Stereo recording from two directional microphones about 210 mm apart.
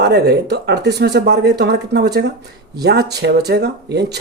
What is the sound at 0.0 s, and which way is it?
Speech, 50° right (ahead or behind).